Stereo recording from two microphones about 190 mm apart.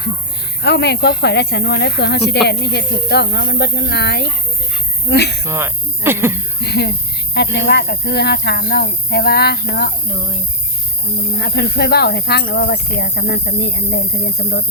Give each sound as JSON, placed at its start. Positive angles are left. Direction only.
{"t": 0.6, "sound": "speech", "side_deg": 60}
{"t": 5.5, "sound": "speech", "side_deg": -15}
{"t": 6.6, "sound": "speech", "side_deg": 60}
{"t": 11.3, "sound": "speech", "side_deg": 60}